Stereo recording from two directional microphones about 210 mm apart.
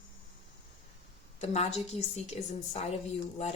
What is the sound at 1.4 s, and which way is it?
Speech, 30° left (ahead or behind).